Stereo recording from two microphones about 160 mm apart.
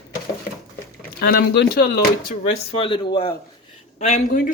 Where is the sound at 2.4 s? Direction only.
30° left (ahead or behind).